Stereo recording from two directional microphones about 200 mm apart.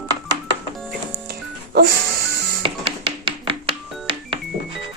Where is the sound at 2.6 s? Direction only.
25° right (ahead or behind).